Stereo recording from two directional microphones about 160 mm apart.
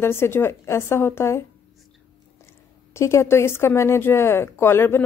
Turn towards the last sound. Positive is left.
turn(degrees=15)  # may be behind; listen again after turning